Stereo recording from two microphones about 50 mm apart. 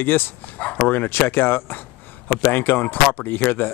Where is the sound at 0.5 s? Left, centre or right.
Left.